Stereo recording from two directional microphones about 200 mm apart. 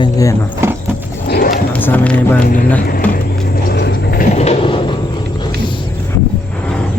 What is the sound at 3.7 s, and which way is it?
Vehicle, 55° left (ahead or behind).